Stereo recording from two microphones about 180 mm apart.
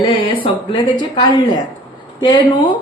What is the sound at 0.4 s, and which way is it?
Speech, 25° left (ahead or behind).